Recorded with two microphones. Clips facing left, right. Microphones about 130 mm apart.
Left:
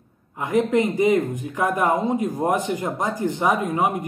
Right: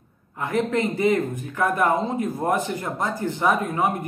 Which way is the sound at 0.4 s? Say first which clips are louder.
Left 3 dB; 15° left (ahead or behind).